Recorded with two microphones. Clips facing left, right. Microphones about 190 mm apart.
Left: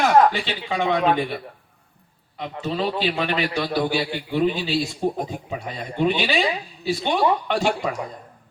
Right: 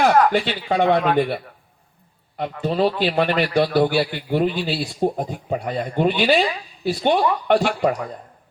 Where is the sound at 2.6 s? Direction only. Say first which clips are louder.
Right 4 dB; 45° right (ahead or behind).